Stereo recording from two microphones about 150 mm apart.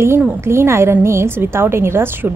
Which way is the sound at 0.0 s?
15° right (ahead or behind).